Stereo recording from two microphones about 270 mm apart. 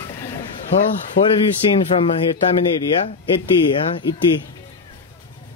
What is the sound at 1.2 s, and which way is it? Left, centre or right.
Speech, left.